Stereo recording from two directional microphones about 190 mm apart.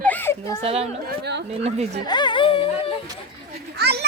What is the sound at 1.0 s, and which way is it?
Speech, 60° right (ahead or behind).